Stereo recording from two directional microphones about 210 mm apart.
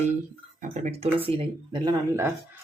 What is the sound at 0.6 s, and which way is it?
Speech, 30° right (ahead or behind).